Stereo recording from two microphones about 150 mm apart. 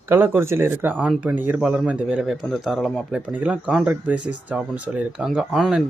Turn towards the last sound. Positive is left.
turn(degrees=0)  # may be behind; listen again after turning